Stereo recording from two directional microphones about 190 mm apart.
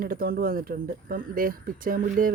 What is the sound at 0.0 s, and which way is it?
Speech, 50° right (ahead or behind).